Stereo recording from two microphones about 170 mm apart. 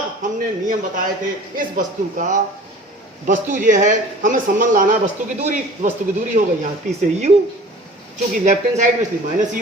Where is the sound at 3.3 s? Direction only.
50° right (ahead or behind).